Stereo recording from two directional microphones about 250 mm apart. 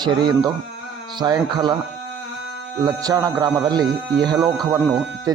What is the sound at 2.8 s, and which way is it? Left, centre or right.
A man's voice, centre.